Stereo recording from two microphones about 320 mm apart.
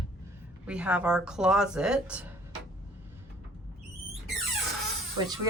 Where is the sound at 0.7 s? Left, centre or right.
Centre.